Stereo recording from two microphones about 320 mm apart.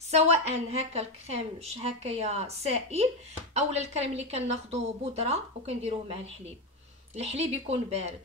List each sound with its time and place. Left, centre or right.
0.1 s a woman's voice: centre